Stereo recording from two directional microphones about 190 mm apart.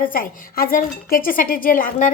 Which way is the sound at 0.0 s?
50° left (ahead or behind).